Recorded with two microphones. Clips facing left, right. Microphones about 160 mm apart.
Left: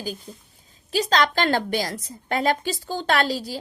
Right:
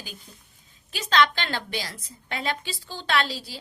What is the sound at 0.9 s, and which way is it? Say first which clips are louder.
A woman's voice: left 2 dB; 40° left (ahead or behind).